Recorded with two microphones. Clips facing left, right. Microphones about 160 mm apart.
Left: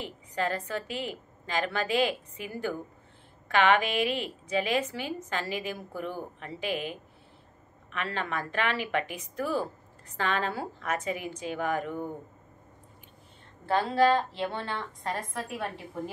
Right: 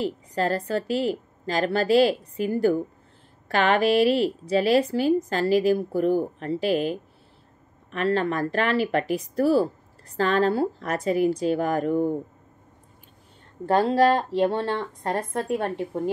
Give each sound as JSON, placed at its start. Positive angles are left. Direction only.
{"t": 0.0, "sound": "a woman's voice", "side_deg": -35}
{"t": 14.3, "sound": "a woman's voice", "side_deg": -40}